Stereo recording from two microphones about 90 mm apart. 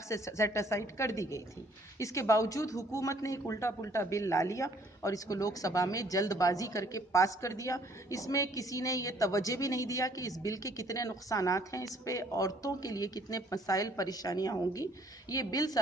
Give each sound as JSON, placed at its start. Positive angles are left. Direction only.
{"t": 0.1, "sound": "a man's voice", "side_deg": 35}